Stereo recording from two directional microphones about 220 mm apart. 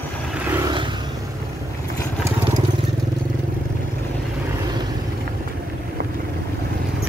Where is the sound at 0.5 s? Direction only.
15° right (ahead or behind).